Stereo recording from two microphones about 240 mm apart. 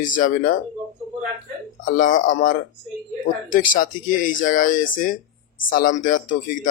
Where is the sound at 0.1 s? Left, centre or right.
Left.